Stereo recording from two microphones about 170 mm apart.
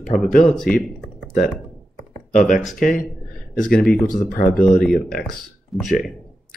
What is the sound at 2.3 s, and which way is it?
Speech, 50° left (ahead or behind).